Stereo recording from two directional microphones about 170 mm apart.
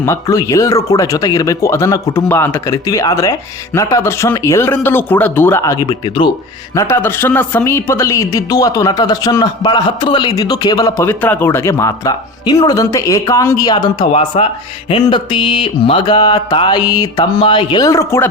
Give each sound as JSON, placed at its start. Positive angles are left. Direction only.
{"t": 0.0, "sound": "speech", "side_deg": 20}
{"t": 6.7, "sound": "speech", "side_deg": 15}